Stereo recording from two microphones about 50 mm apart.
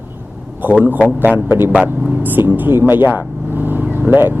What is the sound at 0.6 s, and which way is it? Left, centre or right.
Speech, right.